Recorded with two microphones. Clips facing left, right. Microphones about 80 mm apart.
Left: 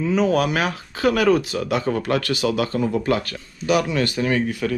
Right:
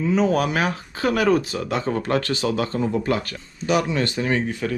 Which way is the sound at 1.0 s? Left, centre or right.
Left.